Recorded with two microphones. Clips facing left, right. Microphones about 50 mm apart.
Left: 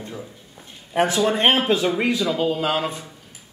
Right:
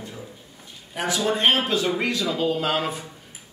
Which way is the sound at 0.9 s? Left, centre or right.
Left.